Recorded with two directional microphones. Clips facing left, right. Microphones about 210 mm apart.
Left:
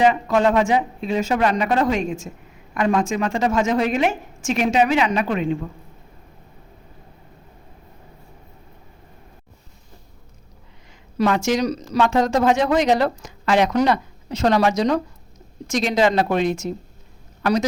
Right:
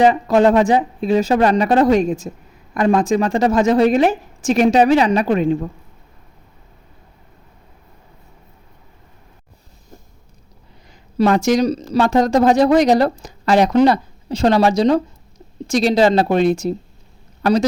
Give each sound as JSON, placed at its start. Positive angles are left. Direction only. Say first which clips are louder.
{"t": 0.0, "sound": "speech", "louder": "right 4 dB", "side_deg": -35}
{"t": 11.2, "sound": "speech", "louder": "right 5 dB", "side_deg": -35}